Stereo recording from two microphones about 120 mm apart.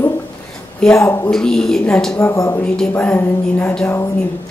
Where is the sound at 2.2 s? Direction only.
20° left (ahead or behind).